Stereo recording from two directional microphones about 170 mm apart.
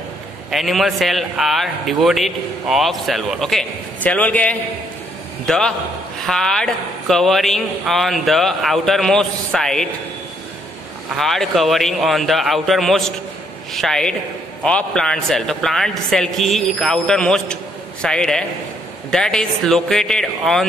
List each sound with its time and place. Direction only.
0.5 s a man's voice: centre (ahead or behind)
6.2 s a man's voice: 5° left (ahead or behind)
11.1 s a man's voice: centre (ahead or behind)